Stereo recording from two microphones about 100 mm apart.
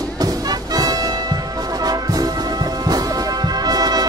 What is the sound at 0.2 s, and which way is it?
Music, 40° right (ahead or behind).